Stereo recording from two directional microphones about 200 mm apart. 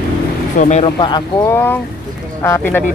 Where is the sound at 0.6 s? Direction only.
35° left (ahead or behind).